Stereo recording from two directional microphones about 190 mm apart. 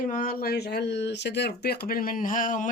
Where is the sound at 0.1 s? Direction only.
45° left (ahead or behind).